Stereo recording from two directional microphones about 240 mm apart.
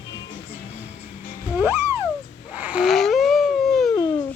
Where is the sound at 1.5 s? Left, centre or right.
Centre.